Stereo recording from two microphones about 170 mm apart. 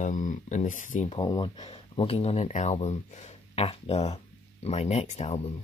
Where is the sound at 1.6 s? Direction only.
35° left (ahead or behind).